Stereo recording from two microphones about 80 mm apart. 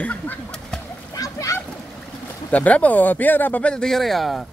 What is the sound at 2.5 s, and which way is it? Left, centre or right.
Speech, centre.